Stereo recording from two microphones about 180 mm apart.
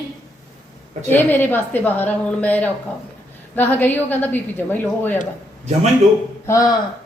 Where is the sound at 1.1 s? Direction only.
10° left (ahead or behind).